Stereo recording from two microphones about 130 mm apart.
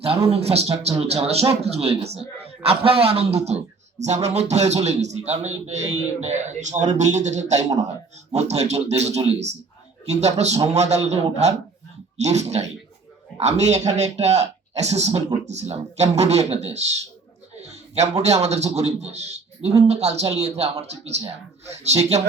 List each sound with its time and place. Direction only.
0.3 s a man's voice: 55° right (ahead or behind)
17.6 s a sound: 55° right (ahead or behind)
18.2 s a man's voice: 55° right (ahead or behind)
21.9 s a man's voice: 35° right (ahead or behind)